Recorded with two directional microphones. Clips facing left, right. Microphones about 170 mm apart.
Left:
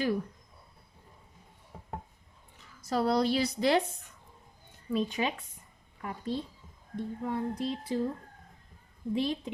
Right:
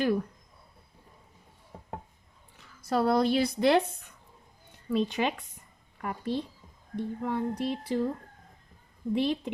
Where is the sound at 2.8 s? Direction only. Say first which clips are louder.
Right 2 dB; 55° right (ahead or behind).